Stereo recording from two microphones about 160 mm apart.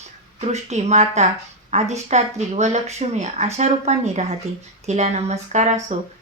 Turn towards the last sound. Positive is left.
turn(degrees=-45)  # may be behind; listen again after turning